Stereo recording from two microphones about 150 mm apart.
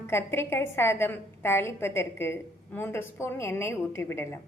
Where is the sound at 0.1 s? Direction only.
15° left (ahead or behind).